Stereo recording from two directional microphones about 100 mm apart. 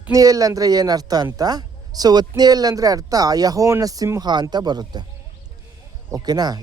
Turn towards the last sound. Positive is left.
turn(degrees=-40)  # may be behind; listen again after turning